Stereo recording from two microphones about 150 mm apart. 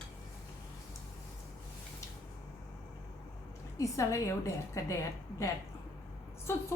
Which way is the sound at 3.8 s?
20° left (ahead or behind).